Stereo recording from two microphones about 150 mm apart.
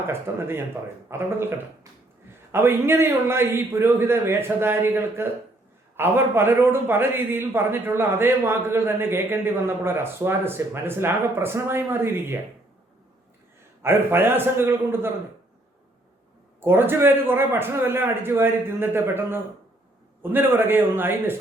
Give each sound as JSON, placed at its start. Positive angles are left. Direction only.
{"t": 0.1, "sound": "a man's voice", "side_deg": -15}
{"t": 13.8, "sound": "a man's voice", "side_deg": -15}
{"t": 16.6, "sound": "a man's voice", "side_deg": -15}